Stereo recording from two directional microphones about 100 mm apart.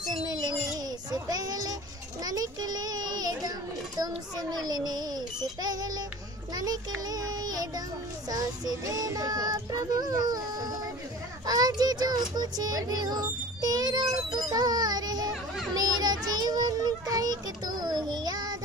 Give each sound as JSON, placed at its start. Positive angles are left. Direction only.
{"t": 0.0, "sound": "music", "side_deg": -40}
{"t": 1.1, "sound": "a child's voice", "side_deg": -40}